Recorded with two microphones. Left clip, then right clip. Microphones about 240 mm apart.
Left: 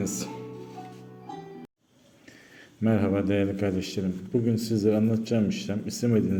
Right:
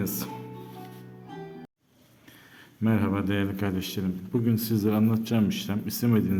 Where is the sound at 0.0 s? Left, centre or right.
Centre.